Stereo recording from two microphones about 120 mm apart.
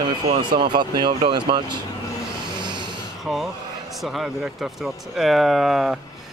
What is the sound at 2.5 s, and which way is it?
Snort, 40° right (ahead or behind).